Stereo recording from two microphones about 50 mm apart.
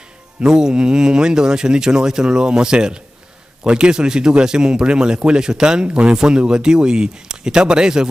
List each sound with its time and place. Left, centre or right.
0.4 s speech: centre